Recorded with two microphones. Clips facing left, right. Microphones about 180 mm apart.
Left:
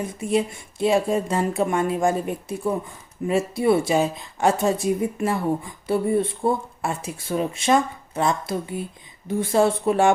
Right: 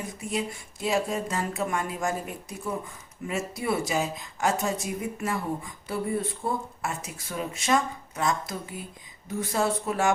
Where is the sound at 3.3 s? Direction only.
30° left (ahead or behind).